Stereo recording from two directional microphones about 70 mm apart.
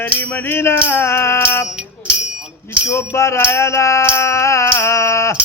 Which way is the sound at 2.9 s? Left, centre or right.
Left.